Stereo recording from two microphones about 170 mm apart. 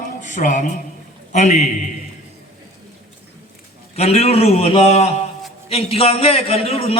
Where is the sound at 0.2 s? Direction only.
50° left (ahead or behind).